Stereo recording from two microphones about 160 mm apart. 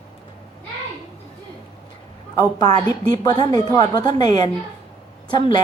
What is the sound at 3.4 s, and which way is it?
A woman's voice, 25° left (ahead or behind).